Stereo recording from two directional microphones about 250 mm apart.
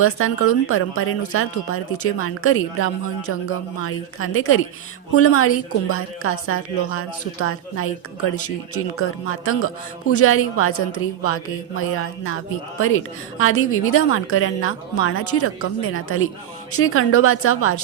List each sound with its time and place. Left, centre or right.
0.0 s a woman's voice: left